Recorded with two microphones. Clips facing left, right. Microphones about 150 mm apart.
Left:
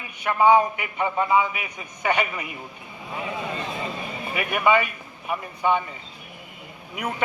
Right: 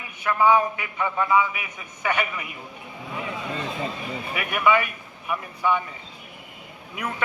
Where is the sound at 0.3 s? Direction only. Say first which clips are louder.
Left 2 dB; 25° left (ahead or behind).